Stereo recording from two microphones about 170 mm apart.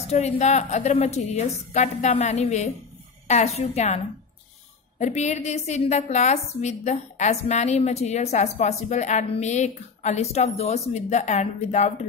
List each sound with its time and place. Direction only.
0.1 s a woman's voice: 40° left (ahead or behind)